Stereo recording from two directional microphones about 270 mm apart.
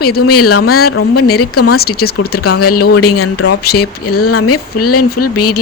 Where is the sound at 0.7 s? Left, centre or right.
Left.